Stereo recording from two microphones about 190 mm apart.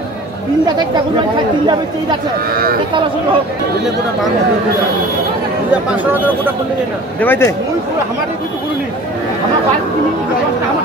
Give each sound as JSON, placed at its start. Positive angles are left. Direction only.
{"t": 2.5, "sound": "speech", "side_deg": -50}
{"t": 7.2, "sound": "speech", "side_deg": 10}